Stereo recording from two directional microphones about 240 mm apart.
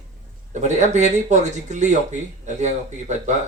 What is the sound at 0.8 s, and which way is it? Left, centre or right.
Speech, right.